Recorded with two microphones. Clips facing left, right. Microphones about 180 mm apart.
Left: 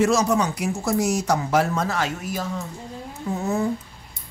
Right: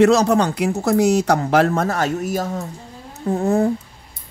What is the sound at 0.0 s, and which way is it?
Speech, 65° right (ahead or behind).